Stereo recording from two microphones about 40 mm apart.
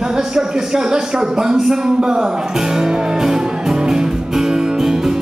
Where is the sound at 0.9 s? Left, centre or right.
Centre.